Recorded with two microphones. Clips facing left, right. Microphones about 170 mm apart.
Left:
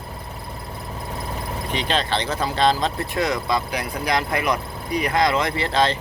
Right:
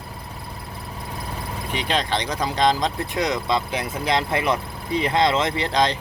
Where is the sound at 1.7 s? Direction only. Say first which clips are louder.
Left 1 dB; 10° right (ahead or behind).